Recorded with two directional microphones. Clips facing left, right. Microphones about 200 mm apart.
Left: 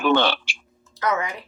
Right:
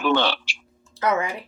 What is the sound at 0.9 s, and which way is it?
Speech, 30° right (ahead or behind).